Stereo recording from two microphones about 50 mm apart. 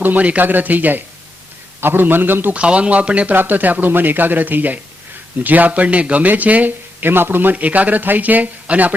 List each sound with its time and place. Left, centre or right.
0.0 s a man's voice: right
2.5 s speech: right
3.3 s speech: right
7.0 s a man's voice: right
7.5 s speech: right